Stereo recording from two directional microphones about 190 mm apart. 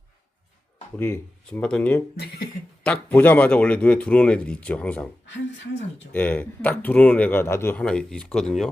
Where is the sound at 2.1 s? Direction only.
55° left (ahead or behind).